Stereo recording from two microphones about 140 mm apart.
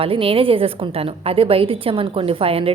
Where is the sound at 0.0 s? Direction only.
40° right (ahead or behind).